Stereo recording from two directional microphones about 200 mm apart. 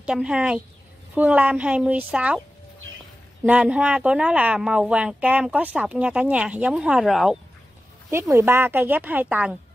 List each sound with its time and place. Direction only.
0.0 s a woman's voice: 5° right (ahead or behind)
3.4 s a woman's voice: 5° right (ahead or behind)
8.1 s a woman's voice: 15° right (ahead or behind)